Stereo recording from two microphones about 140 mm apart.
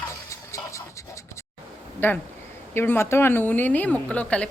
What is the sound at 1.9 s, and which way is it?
A woman's voice, 15° left (ahead or behind).